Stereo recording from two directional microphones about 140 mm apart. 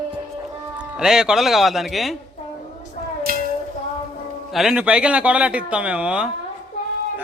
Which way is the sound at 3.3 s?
90° right.